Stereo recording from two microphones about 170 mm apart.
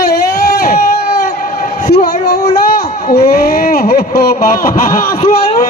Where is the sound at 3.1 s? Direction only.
70° left (ahead or behind).